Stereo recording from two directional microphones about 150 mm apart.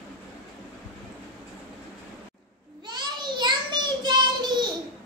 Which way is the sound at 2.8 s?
30° right (ahead or behind).